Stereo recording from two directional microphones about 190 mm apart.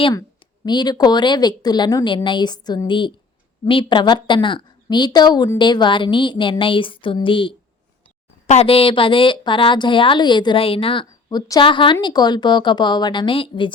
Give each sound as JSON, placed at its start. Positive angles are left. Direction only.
{"t": 0.1, "sound": "speech", "side_deg": 20}